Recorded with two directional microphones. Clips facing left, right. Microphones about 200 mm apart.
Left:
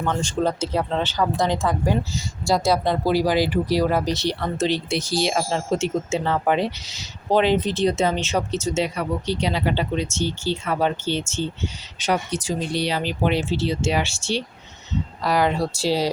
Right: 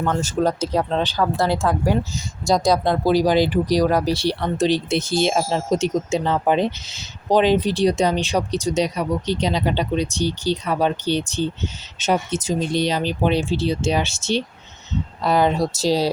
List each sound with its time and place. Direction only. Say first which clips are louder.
0.0 s speech: right 2 dB; 5° right (ahead or behind)
2.6 s speech: right 2 dB; 10° left (ahead or behind)
2.9 s speech: right 3 dB; 20° right (ahead or behind)